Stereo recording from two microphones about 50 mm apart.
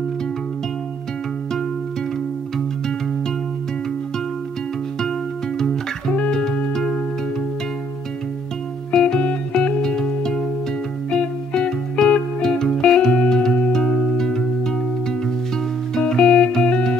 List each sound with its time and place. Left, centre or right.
6.3 s music: centre
8.9 s music: centre
9.8 s music: centre
15.9 s music: centre